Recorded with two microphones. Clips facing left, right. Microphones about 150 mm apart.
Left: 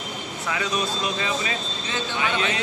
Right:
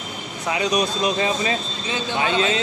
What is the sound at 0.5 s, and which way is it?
Speech, 20° right (ahead or behind).